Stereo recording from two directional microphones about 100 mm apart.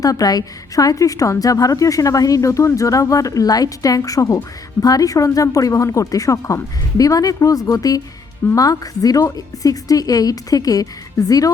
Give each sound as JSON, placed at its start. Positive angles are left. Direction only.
{"t": 0.0, "sound": "a woman's voice", "side_deg": 40}